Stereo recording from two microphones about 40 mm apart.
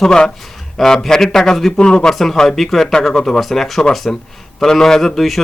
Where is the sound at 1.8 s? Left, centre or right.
Centre.